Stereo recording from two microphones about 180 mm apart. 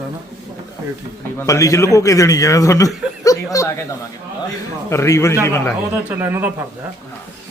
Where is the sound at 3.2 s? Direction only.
20° left (ahead or behind).